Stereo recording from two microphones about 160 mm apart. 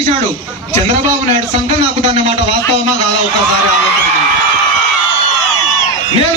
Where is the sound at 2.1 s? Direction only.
45° right (ahead or behind).